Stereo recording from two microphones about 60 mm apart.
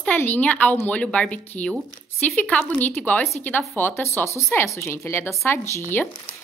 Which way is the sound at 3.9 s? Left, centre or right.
Left.